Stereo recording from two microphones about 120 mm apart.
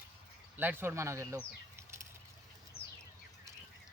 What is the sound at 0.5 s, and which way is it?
Speech, 15° right (ahead or behind).